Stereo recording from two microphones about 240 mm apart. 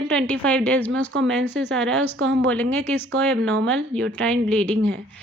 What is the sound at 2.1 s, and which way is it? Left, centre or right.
Speech, right.